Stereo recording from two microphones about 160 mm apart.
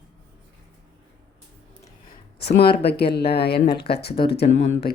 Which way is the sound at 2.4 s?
85° left.